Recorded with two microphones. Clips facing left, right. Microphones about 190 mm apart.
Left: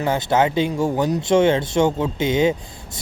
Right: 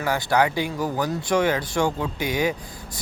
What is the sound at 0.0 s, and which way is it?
Speech, 25° left (ahead or behind).